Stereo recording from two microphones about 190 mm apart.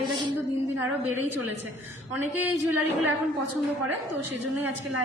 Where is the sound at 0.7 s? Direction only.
10° right (ahead or behind).